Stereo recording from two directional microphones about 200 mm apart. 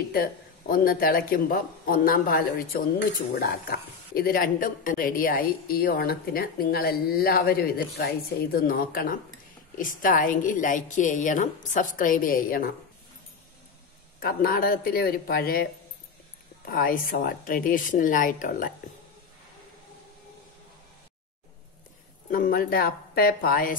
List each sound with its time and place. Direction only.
0.1 s a woman's voice: 45° left (ahead or behind)
14.2 s speech: 45° left (ahead or behind)
22.3 s speech: 45° left (ahead or behind)